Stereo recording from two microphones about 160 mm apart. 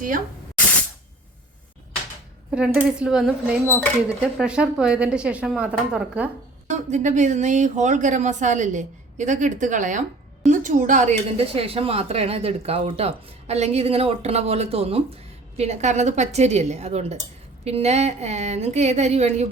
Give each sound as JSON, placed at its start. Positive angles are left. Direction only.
{"t": 2.5, "sound": "speech", "side_deg": -5}
{"t": 6.7, "sound": "a woman's voice", "side_deg": -50}